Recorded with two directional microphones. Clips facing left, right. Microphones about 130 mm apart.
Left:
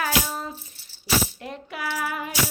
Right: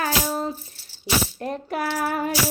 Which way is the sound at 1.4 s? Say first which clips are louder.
Right 6 dB; 45° right (ahead or behind).